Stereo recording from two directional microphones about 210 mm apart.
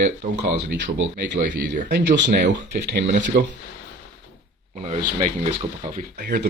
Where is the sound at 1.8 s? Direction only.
50° right (ahead or behind).